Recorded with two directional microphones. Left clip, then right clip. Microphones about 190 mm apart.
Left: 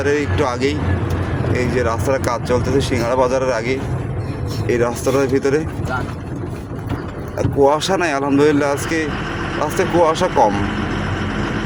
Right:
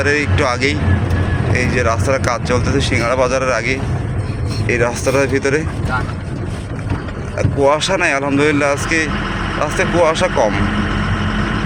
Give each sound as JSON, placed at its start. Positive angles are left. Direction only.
{"t": 0.0, "sound": "speech", "side_deg": 15}
{"t": 7.3, "sound": "speech", "side_deg": 20}